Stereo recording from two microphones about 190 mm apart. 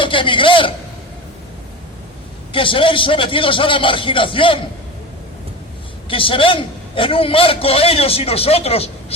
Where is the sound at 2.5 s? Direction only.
25° left (ahead or behind).